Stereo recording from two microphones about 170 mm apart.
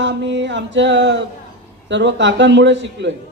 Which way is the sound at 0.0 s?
90° right.